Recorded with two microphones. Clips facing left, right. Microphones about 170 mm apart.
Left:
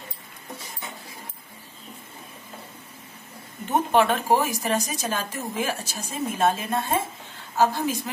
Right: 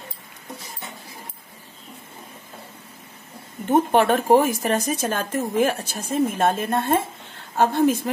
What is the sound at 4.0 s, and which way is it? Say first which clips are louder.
Speech: right 3 dB; 50° right (ahead or behind).